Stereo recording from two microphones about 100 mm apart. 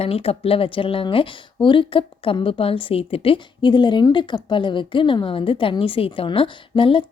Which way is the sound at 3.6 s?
50° left (ahead or behind).